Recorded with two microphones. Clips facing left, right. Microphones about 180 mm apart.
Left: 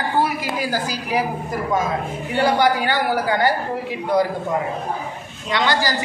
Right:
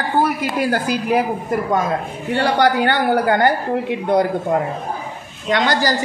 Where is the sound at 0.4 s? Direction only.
60° right (ahead or behind).